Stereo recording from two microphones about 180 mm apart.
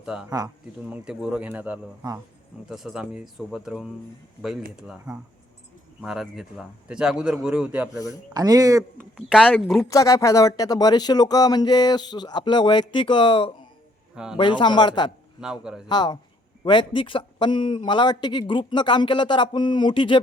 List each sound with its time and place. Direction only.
0.0 s speech: 5° right (ahead or behind)
0.3 s speech: 20° right (ahead or behind)
0.9 s a man's voice: 5° right (ahead or behind)
8.3 s speech: 20° right (ahead or behind)
9.1 s a man's voice: centre (ahead or behind)
9.9 s speech: 20° left (ahead or behind)
15.4 s a man's voice: 5° right (ahead or behind)
15.9 s speech: 25° left (ahead or behind)